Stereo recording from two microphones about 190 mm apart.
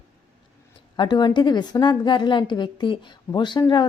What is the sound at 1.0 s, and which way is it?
A woman's voice, 25° left (ahead or behind).